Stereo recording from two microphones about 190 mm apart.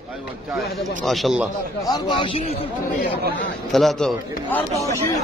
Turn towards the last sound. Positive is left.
turn(degrees=15)  # may be behind; listen again after turning